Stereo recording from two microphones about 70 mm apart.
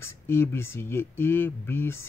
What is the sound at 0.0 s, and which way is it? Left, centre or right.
Speech, left.